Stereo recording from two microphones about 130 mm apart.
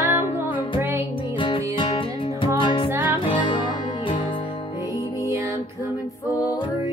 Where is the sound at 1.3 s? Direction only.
40° left (ahead or behind).